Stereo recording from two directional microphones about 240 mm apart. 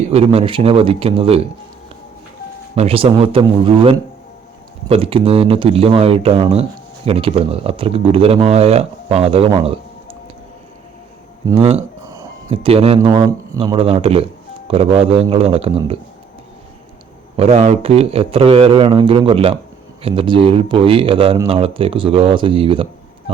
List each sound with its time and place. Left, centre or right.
0.1 s speech: right
2.7 s speech: right
11.4 s speech: right
17.3 s speech: right